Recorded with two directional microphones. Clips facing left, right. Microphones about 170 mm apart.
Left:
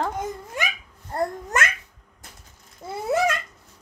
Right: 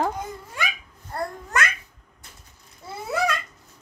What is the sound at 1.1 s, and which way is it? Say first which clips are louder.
Babbling: left 4 dB; 20° left (ahead or behind).